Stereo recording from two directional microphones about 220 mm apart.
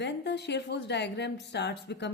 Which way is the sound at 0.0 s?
50° left (ahead or behind).